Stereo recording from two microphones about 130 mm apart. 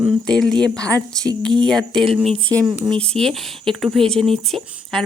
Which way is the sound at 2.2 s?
50° right (ahead or behind).